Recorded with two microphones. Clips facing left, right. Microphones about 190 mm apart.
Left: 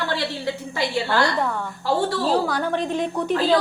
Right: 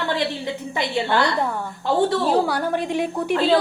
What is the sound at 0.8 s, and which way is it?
A woman's voice, 20° right (ahead or behind).